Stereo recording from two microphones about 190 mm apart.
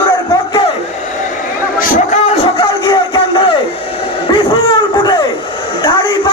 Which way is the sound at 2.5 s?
25° left (ahead or behind).